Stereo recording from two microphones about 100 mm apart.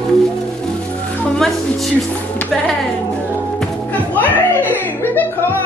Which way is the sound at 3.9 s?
15° left (ahead or behind).